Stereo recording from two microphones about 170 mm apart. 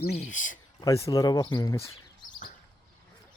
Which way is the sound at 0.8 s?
20° left (ahead or behind).